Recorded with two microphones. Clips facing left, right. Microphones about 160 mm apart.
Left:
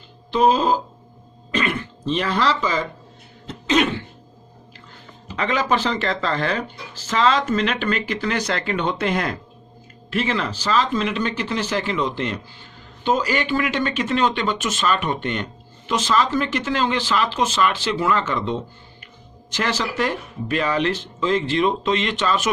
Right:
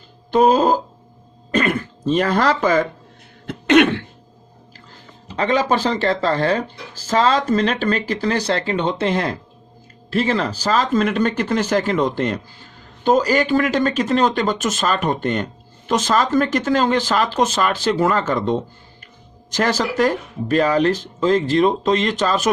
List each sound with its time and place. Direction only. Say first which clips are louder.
0.3 s speech: right 3 dB; 45° right (ahead or behind)
1.5 s throat clearing: right 4 dB; 45° right (ahead or behind)
3.4 s cough: right 6 dB; 65° right (ahead or behind)
5.4 s speech: right 3 dB; 35° right (ahead or behind)